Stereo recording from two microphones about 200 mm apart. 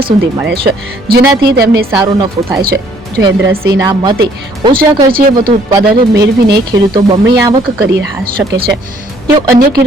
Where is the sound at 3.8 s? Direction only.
20° right (ahead or behind).